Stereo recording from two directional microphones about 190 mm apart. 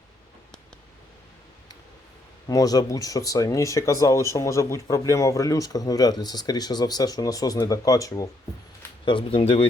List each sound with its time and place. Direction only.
2.5 s speech: 20° left (ahead or behind)